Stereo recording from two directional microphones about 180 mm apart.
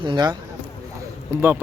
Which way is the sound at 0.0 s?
25° right (ahead or behind).